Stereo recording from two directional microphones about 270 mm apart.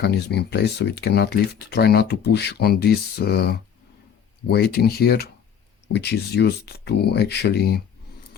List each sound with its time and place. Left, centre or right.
0.0 s speech: left